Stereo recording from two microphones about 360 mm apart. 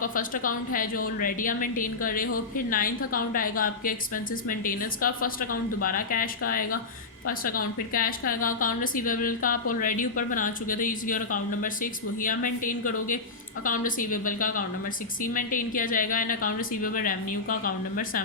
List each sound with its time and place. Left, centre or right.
0.0 s a woman's voice: left